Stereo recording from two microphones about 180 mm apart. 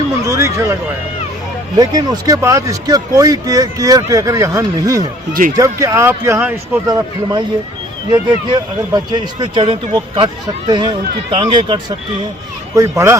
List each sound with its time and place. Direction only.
0.3 s a sound: 15° right (ahead or behind)
1.7 s speech: 20° right (ahead or behind)
5.3 s speech: 50° right (ahead or behind)
5.5 s speech: 15° right (ahead or behind)